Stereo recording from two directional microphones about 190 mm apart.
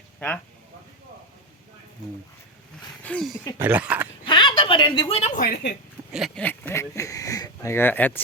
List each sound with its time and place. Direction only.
3.0 s speech: 5° left (ahead or behind)
4.3 s a woman's voice: 25° left (ahead or behind)
5.4 s a woman's voice: 55° left (ahead or behind)
6.1 s speech: centre (ahead or behind)